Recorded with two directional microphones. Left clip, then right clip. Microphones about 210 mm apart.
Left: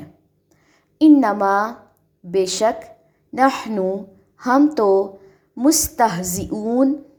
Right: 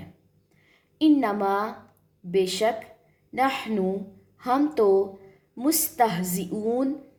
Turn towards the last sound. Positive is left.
turn(degrees=15)  # may be behind; listen again after turning